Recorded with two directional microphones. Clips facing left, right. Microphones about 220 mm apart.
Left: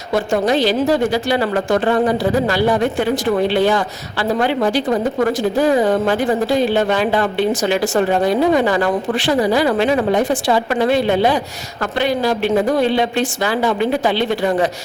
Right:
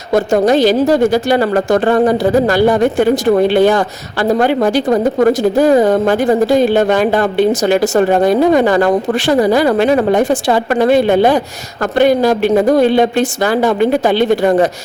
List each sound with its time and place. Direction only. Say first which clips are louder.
0.1 s a woman's voice: right 5 dB; 45° right (ahead or behind)